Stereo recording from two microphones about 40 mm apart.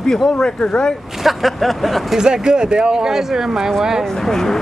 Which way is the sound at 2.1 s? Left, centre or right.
Centre.